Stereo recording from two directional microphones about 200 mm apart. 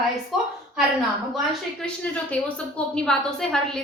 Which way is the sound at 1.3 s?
5° left (ahead or behind).